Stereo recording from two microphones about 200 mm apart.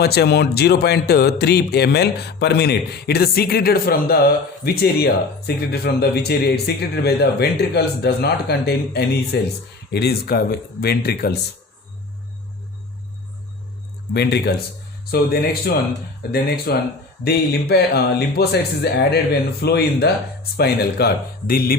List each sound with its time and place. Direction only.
0.0 s speech: 55° left (ahead or behind)
14.1 s speech: 55° left (ahead or behind)